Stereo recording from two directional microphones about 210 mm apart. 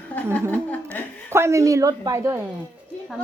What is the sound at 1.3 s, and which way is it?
A woman's voice, 15° right (ahead or behind).